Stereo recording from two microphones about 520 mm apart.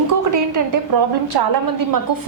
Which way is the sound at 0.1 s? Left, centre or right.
Right.